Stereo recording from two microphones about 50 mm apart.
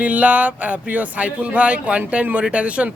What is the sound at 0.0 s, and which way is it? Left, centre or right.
Speech, right.